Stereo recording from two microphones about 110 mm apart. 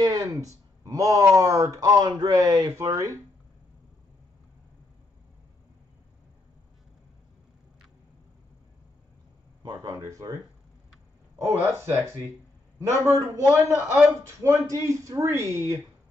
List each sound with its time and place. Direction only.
0.0 s speech: 30° right (ahead or behind)
9.6 s speech: 35° right (ahead or behind)
11.4 s speech: 25° right (ahead or behind)